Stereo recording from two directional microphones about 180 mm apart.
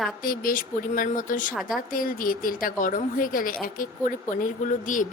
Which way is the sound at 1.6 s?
Centre (ahead or behind).